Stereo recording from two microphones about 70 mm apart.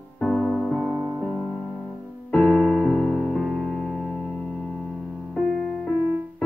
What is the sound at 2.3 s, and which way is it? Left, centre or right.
Music, centre.